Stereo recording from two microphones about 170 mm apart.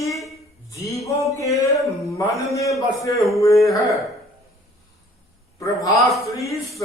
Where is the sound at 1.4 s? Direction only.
20° left (ahead or behind).